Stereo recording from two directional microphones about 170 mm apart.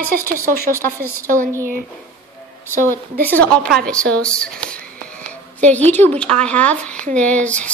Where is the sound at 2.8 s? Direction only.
10° left (ahead or behind).